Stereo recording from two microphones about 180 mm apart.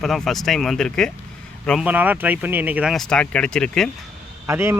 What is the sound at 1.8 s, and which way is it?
Speech, 10° right (ahead or behind).